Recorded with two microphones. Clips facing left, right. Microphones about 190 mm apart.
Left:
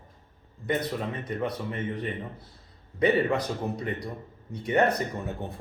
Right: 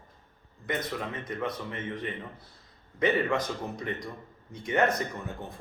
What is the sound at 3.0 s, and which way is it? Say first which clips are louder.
A man's voice: left 3 dB; 35° left (ahead or behind).